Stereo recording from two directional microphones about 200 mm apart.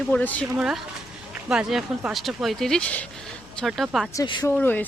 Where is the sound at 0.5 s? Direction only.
5° right (ahead or behind).